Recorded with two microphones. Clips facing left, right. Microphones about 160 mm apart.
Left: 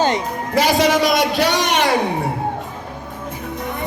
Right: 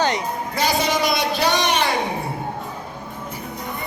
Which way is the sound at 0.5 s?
90° left.